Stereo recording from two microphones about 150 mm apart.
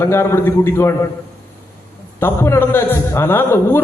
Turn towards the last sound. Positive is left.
turn(degrees=15)  # may be behind; listen again after turning